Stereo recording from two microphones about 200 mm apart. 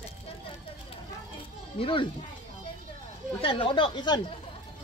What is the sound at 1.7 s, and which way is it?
Speech, 25° left (ahead or behind).